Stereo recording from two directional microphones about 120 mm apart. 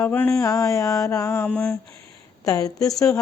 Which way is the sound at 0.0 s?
15° left (ahead or behind).